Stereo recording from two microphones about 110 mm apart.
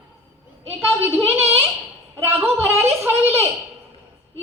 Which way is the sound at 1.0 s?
20° right (ahead or behind).